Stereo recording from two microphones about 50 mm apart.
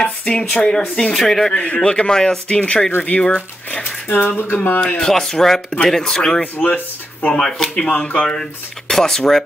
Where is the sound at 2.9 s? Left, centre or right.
Left.